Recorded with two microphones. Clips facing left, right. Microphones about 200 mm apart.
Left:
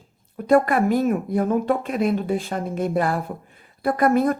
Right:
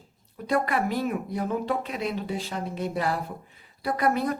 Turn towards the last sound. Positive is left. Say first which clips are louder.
# left 7 dB
turn(degrees=50)  # may be behind; listen again after turning